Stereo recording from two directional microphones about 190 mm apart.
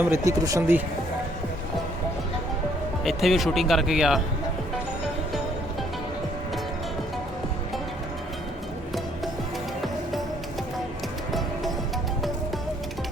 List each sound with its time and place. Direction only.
0.1 s speech: 15° right (ahead or behind)
3.0 s speech: centre (ahead or behind)
9.8 s music: centre (ahead or behind)
11.3 s music: centre (ahead or behind)